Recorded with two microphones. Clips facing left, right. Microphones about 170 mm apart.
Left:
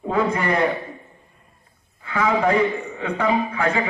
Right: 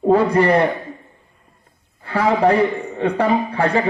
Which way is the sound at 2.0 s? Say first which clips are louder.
Right 4 dB; 35° right (ahead or behind).